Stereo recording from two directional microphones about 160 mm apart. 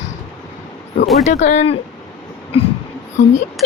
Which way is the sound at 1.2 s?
45° left (ahead or behind).